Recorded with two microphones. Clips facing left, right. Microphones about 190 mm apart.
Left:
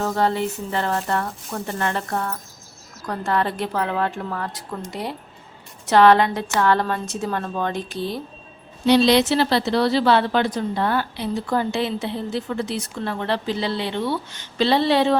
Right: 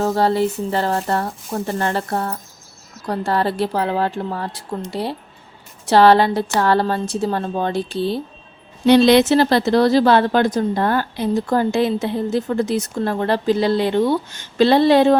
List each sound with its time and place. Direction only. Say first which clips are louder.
0.0 s a woman's voice: right 4 dB; 35° right (ahead or behind)
8.9 s a woman's voice: right 4 dB; 55° right (ahead or behind)